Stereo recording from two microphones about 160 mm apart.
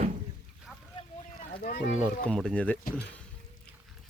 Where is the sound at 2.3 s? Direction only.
5° left (ahead or behind).